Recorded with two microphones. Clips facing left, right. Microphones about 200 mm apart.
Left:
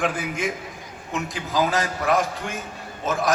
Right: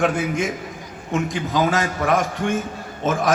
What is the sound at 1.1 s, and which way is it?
A man's voice, 50° right (ahead or behind).